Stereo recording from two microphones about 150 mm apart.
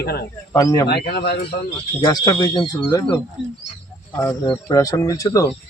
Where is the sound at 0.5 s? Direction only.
25° left (ahead or behind).